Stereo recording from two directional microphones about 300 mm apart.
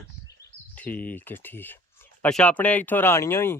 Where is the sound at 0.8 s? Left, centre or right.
Centre.